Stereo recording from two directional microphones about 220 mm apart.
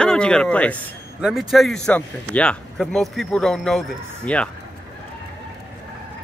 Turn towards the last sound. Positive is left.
turn(degrees=5)  # may be behind; listen again after turning